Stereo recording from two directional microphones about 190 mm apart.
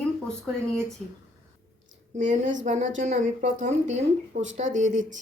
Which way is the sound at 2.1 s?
40° right (ahead or behind).